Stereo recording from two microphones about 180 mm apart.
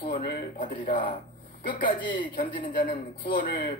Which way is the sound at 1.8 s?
25° left (ahead or behind).